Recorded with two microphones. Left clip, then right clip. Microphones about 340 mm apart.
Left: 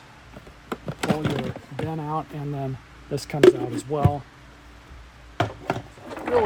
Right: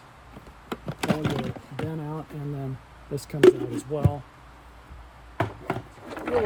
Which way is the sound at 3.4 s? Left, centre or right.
Centre.